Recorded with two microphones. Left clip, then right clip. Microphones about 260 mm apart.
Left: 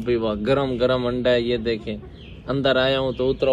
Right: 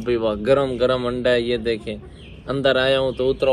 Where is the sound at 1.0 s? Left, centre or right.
Right.